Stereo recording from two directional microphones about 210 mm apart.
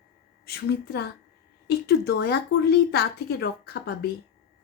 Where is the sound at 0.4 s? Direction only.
50° left (ahead or behind).